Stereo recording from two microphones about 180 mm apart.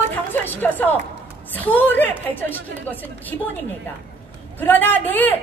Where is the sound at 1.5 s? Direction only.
10° left (ahead or behind).